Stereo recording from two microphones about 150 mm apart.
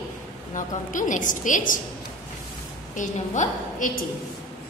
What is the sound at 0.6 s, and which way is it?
A woman's voice, 60° left (ahead or behind).